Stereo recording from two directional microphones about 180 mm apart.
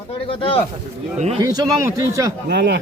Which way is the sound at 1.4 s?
20° right (ahead or behind).